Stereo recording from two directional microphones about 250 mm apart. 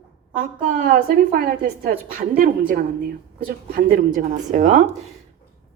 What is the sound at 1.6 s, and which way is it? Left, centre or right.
A woman's voice, right.